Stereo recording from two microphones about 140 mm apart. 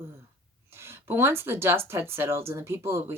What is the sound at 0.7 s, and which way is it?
Speech, 15° right (ahead or behind).